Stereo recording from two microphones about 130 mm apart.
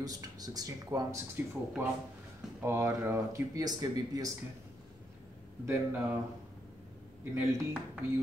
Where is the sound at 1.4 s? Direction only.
15° right (ahead or behind).